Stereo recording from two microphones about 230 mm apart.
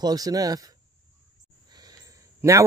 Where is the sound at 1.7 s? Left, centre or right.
Centre.